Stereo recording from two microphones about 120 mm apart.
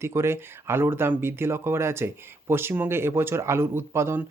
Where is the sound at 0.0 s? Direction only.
20° right (ahead or behind).